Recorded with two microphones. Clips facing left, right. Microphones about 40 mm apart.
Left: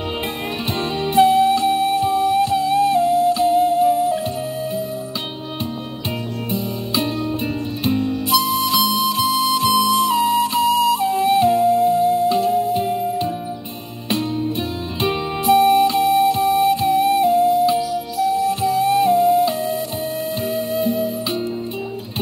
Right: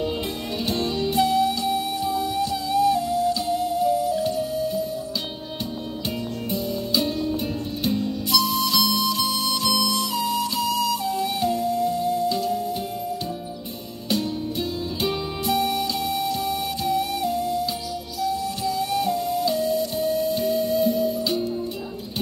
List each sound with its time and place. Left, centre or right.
0.7 s music: left
6.5 s music: left
14.0 s music: left